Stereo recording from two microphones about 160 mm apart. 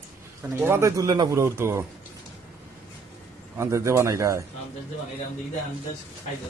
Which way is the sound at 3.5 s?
20° right (ahead or behind).